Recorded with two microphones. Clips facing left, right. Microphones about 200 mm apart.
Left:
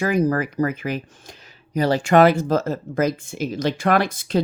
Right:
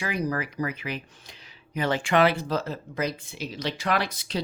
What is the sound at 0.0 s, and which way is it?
Speech, 45° left (ahead or behind).